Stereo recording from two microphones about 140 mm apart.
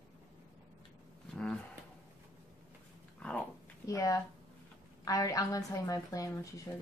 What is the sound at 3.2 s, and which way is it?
Dog, 10° left (ahead or behind).